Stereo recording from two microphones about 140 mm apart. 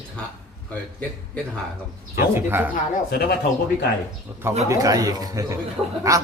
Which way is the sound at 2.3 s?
15° right (ahead or behind).